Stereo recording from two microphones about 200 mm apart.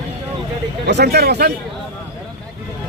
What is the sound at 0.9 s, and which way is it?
Speech, 55° right (ahead or behind).